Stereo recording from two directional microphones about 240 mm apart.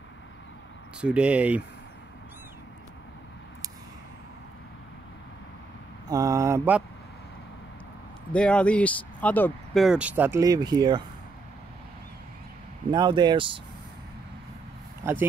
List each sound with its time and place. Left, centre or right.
1.0 s speech: centre
6.0 s speech: centre
8.3 s speech: centre
12.9 s speech: centre
15.0 s speech: centre